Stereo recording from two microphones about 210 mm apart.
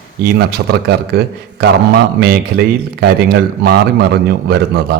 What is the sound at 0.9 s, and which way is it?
A man's voice, 50° right (ahead or behind).